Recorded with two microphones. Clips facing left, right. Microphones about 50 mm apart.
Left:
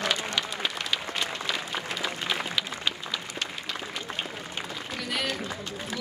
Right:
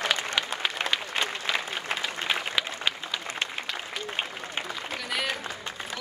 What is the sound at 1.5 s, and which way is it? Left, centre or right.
Applause, right.